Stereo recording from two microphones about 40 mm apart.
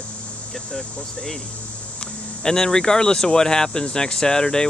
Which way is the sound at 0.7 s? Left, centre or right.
Centre.